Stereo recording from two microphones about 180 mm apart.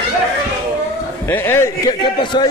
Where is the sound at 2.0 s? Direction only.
25° left (ahead or behind).